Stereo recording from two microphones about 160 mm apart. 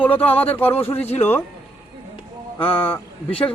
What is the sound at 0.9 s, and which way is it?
Speech, 40° left (ahead or behind).